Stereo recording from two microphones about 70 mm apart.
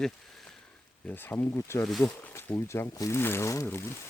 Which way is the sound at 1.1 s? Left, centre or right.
Left.